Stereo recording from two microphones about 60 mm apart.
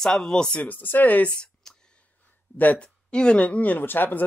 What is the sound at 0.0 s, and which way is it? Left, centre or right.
Speech, centre.